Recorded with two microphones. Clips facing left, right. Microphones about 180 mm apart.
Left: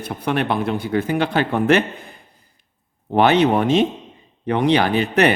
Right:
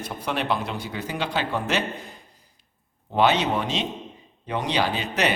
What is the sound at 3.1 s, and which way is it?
Speech, 60° left (ahead or behind).